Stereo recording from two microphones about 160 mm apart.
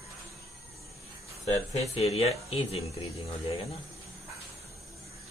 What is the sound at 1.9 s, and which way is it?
Speech, 40° left (ahead or behind).